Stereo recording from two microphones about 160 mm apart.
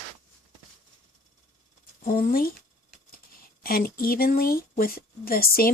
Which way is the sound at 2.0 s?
65° left (ahead or behind).